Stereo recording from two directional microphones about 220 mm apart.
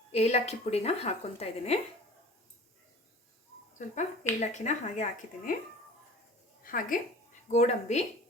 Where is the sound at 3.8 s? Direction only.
35° left (ahead or behind).